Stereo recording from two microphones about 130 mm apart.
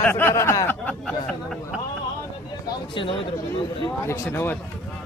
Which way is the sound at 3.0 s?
40° left (ahead or behind).